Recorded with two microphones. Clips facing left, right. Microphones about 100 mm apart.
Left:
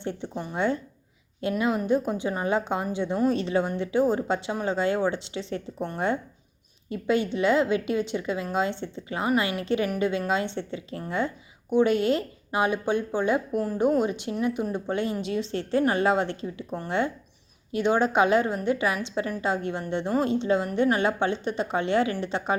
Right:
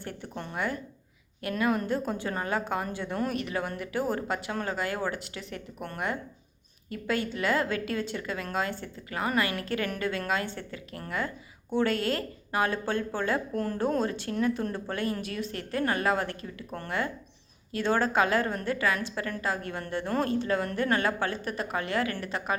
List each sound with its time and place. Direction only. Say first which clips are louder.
0.0 s a woman's voice: left 6 dB; 20° left (ahead or behind)
6.9 s a woman's voice: left 6 dB; 20° left (ahead or behind)